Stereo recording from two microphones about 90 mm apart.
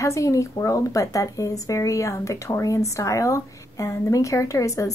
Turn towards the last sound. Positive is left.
turn(degrees=40)  # may be behind; listen again after turning